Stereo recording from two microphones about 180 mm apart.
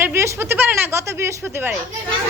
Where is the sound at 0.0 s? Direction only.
15° right (ahead or behind).